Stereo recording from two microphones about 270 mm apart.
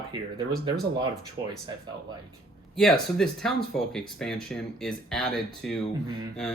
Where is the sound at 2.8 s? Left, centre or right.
Centre.